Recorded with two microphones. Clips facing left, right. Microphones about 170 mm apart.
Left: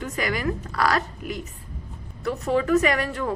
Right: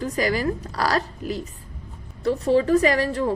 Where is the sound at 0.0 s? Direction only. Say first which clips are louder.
Right 4 dB; 35° right (ahead or behind).